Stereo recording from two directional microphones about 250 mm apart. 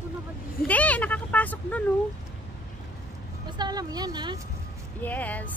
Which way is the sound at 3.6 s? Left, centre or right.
Centre.